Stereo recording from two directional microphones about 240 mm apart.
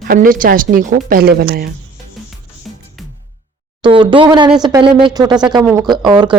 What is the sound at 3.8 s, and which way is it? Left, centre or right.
Speech, right.